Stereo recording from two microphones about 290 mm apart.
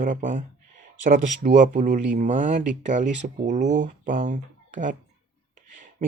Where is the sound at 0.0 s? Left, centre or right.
Right.